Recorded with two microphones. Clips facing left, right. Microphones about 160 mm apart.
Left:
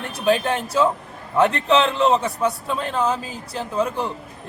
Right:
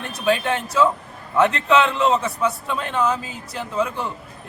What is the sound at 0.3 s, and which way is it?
A man's voice, 35° left (ahead or behind).